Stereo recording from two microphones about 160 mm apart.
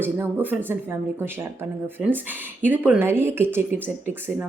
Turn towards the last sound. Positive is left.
turn(degrees=-10)  # may be behind; listen again after turning